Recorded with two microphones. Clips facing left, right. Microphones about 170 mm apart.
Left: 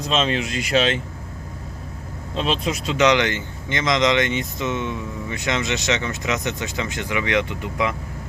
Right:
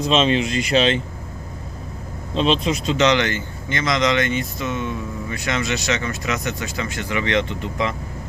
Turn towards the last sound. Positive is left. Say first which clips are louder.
# even
turn(degrees=10)  # may be behind; listen again after turning